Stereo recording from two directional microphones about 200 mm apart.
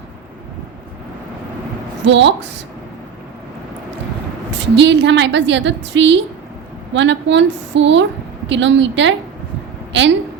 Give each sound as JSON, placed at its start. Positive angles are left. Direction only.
{"t": 2.0, "sound": "a woman's voice", "side_deg": -65}
{"t": 4.5, "sound": "a woman's voice", "side_deg": -60}